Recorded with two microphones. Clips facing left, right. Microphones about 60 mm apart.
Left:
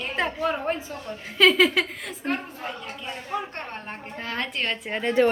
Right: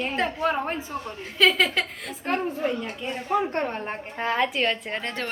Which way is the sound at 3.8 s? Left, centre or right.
Right.